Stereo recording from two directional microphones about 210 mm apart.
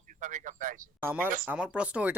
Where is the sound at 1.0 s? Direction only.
10° right (ahead or behind).